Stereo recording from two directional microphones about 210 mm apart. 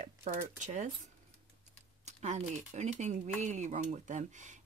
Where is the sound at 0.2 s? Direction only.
35° right (ahead or behind).